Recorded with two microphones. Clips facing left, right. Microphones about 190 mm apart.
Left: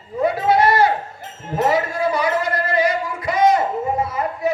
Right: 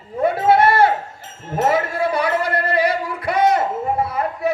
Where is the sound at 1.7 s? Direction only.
60° right (ahead or behind).